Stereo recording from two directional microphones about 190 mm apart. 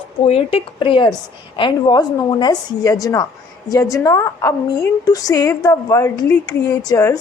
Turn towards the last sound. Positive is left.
turn(degrees=20)  # may be behind; listen again after turning